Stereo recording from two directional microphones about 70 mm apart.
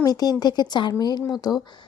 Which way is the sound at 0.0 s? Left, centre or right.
Left.